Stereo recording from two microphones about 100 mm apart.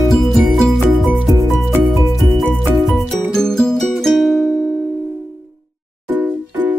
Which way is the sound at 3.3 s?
5° left (ahead or behind).